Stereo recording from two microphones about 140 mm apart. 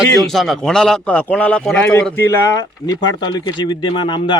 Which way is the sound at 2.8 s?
30° left (ahead or behind).